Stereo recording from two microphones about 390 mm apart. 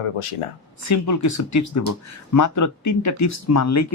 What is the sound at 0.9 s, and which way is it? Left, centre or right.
Speech, left.